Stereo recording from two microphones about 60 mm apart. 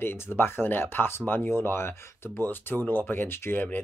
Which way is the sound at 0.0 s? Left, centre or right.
Left.